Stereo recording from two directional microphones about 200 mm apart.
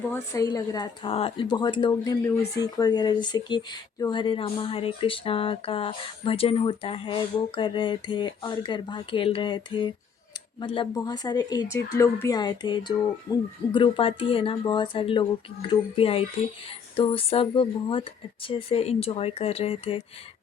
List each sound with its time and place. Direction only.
0.1 s speech: 20° left (ahead or behind)